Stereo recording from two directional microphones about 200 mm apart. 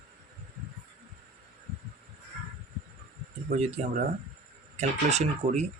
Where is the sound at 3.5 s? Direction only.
30° right (ahead or behind).